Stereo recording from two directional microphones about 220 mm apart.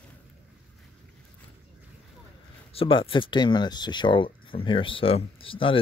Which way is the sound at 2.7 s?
25° left (ahead or behind).